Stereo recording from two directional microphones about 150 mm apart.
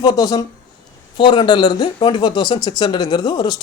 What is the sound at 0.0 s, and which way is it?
Speech, 25° left (ahead or behind).